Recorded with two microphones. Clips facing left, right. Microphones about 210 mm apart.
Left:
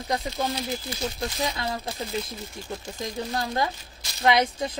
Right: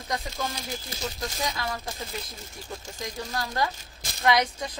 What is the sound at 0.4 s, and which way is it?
Speech, 30° left (ahead or behind).